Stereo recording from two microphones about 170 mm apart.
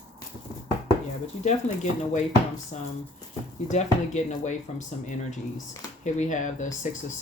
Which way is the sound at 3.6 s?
40° left (ahead or behind).